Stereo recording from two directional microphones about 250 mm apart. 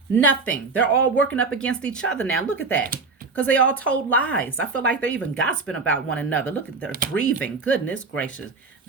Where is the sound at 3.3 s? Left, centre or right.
Centre.